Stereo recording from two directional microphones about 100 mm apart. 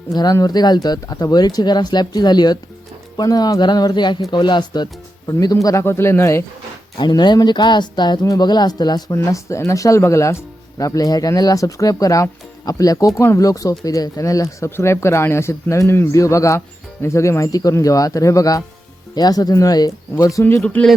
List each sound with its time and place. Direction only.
0.2 s speech: 40° left (ahead or behind)
5.6 s speech: 30° left (ahead or behind)
7.0 s speech: 45° left (ahead or behind)
9.1 s speech: 30° left (ahead or behind)
20.6 s speech: 10° left (ahead or behind)